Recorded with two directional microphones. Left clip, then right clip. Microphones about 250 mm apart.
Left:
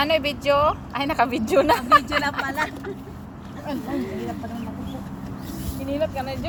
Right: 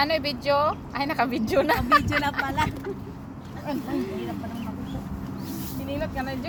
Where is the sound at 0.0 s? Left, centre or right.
Centre.